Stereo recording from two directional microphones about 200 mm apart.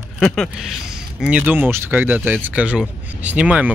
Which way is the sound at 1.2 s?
5° right (ahead or behind).